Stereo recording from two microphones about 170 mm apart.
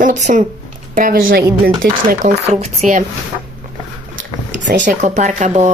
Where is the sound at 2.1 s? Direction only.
45° right (ahead or behind).